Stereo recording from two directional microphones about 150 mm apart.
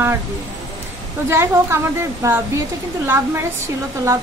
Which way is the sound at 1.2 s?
15° right (ahead or behind).